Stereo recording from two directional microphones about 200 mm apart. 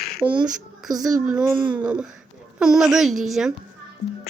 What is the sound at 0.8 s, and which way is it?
Speech, centre (ahead or behind).